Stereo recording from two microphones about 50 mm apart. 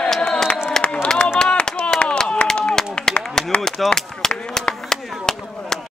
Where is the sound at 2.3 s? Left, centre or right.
Centre.